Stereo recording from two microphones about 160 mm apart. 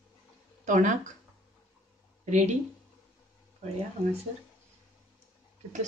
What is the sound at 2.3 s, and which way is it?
Speech, 45° right (ahead or behind).